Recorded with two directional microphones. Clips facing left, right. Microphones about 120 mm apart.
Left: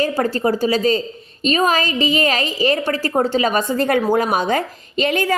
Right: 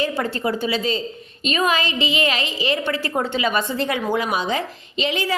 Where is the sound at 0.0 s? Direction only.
40° left (ahead or behind).